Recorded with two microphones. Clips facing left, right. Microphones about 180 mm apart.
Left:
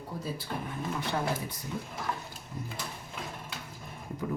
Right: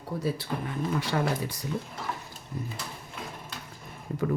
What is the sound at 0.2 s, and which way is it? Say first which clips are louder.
Speech: right 5 dB; 75° right (ahead or behind).